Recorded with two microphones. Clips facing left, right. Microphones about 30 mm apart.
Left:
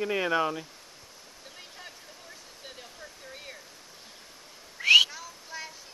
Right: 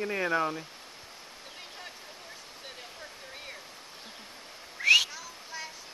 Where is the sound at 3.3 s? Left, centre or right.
Centre.